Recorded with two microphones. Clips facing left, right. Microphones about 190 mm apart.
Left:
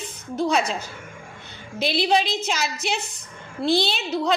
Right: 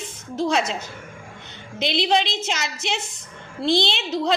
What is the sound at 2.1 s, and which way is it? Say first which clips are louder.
A woman's voice: even; 25° right (ahead or behind).